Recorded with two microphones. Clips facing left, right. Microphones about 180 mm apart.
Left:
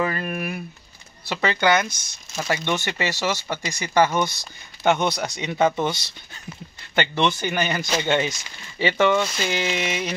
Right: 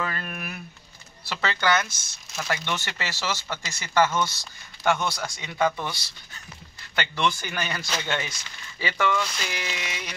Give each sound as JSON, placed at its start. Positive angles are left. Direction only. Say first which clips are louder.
{"t": 0.0, "sound": "speech", "louder": "left 7 dB", "side_deg": 15}
{"t": 2.3, "sound": "speech", "louder": "left 4 dB", "side_deg": 0}
{"t": 2.6, "sound": "speech", "louder": "left 7 dB", "side_deg": 15}